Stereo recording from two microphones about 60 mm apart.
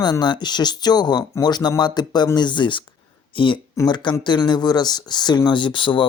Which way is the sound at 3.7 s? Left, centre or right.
Left.